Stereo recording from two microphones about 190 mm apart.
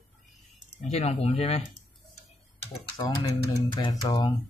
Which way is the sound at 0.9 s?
35° left (ahead or behind).